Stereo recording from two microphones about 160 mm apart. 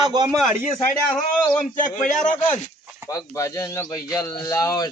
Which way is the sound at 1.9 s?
50° left (ahead or behind).